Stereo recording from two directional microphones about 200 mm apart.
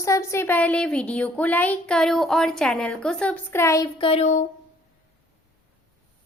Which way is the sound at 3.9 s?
30° left (ahead or behind).